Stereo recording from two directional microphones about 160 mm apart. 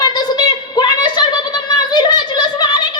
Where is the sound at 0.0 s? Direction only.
25° left (ahead or behind).